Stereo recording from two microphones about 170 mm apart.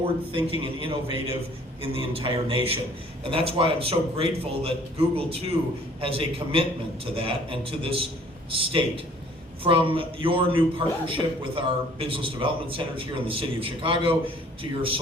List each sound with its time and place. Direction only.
0.6 s a man's voice: 30° right (ahead or behind)